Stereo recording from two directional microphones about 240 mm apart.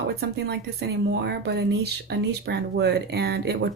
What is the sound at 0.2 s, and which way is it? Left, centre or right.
Speech, right.